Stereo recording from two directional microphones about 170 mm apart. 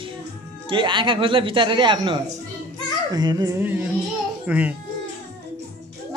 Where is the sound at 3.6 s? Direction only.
10° right (ahead or behind).